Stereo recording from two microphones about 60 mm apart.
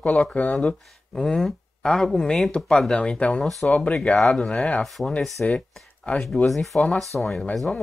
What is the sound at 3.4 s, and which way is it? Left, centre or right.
Speech, centre.